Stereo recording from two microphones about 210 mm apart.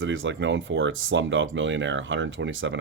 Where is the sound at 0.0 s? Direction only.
65° right (ahead or behind).